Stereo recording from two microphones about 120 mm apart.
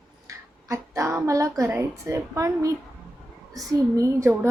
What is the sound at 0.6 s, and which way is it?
A woman's voice, 25° right (ahead or behind).